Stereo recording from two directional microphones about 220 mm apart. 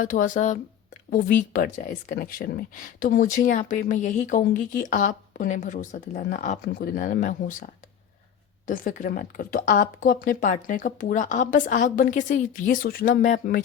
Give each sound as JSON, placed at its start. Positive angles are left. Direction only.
{"t": 0.0, "sound": "speech", "side_deg": 35}